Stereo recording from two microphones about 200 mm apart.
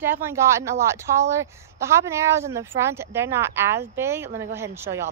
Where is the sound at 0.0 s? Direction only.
10° right (ahead or behind).